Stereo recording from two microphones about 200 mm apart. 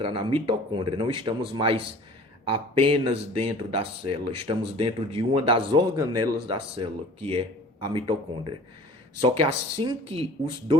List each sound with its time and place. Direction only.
0.0 s speech: 25° right (ahead or behind)